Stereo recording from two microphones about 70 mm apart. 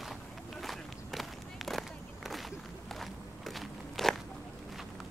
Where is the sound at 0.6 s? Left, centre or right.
Centre.